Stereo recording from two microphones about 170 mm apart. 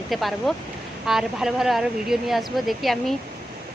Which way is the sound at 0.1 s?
Centre (ahead or behind).